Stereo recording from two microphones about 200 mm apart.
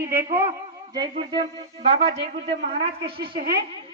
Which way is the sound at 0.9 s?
20° right (ahead or behind).